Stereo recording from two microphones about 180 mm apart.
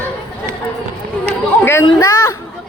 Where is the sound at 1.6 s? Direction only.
15° left (ahead or behind).